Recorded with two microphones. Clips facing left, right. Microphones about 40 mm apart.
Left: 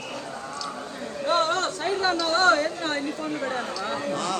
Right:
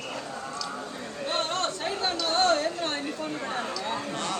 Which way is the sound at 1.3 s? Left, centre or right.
Left.